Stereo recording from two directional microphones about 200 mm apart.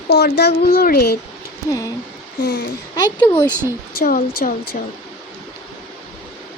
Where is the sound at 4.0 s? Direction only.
45° left (ahead or behind).